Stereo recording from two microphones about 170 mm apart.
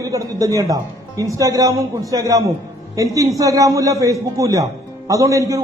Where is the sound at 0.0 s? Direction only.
20° right (ahead or behind).